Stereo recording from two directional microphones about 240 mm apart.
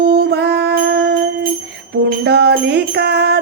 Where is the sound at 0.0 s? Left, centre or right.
Right.